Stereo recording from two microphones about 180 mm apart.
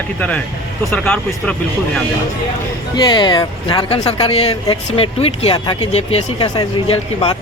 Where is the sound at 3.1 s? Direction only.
25° left (ahead or behind).